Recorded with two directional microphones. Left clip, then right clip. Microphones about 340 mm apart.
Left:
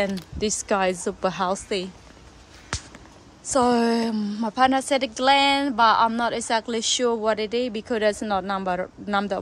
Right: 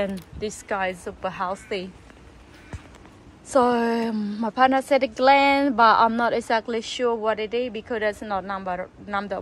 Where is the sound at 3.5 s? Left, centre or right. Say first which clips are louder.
Even; centre.